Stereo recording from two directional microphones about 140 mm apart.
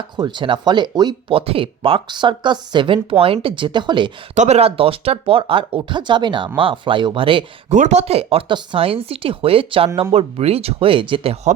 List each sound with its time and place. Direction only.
0.2 s speech: 30° right (ahead or behind)
4.4 s speech: 50° right (ahead or behind)
7.7 s speech: 55° right (ahead or behind)